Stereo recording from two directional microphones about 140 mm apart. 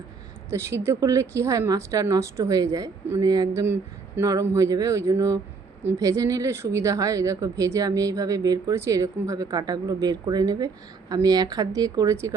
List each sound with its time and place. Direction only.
0.5 s a woman's voice: 20° right (ahead or behind)